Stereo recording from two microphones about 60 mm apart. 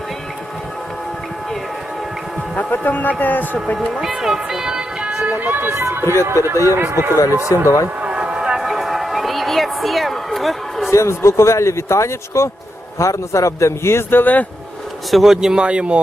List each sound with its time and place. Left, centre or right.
2.6 s speech: left
3.8 s speech: centre; by 7.7 s right
8.0 s a sound: centre
10.9 s speech: left
15.1 s speech: centre